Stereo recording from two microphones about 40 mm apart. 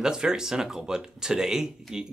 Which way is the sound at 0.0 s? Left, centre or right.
Centre.